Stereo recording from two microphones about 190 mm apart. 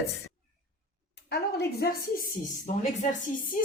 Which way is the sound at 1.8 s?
50° left (ahead or behind).